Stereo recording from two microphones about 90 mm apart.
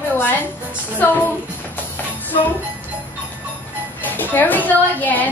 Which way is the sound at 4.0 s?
20° left (ahead or behind).